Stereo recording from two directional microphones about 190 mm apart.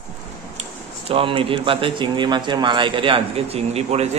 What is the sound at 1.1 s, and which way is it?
A man's voice, 30° right (ahead or behind).